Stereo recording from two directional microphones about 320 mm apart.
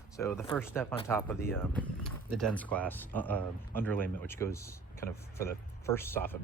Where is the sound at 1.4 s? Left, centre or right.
Centre.